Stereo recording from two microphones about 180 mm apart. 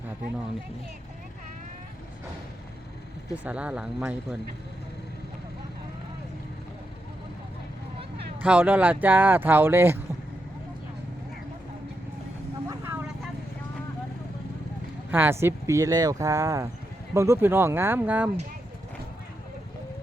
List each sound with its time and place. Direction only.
3.3 s speech: 10° right (ahead or behind)
8.4 s speech: 10° right (ahead or behind)
12.6 s vehicle: 15° right (ahead or behind)
15.1 s speech: 10° right (ahead or behind)